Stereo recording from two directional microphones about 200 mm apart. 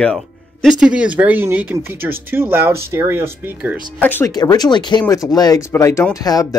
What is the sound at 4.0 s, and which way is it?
Speech, 10° left (ahead or behind).